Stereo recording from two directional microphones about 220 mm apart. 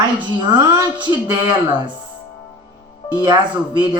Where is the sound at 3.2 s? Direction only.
20° right (ahead or behind).